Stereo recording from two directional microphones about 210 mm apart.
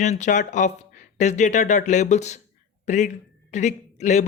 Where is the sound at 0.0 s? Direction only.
35° left (ahead or behind).